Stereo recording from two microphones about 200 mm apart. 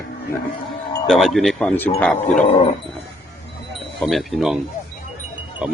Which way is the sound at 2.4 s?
30° left (ahead or behind).